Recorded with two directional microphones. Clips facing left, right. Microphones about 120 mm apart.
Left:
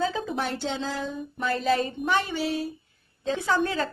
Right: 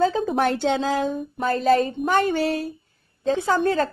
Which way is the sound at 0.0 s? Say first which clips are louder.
Right 7 dB; 45° right (ahead or behind).